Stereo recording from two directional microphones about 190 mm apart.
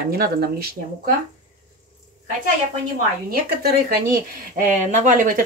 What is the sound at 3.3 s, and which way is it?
Speech, 50° right (ahead or behind).